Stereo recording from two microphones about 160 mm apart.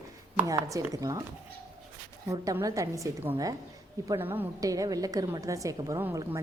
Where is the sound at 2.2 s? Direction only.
20° right (ahead or behind).